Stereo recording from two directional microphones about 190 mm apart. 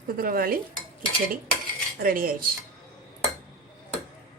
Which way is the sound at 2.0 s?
50° right (ahead or behind).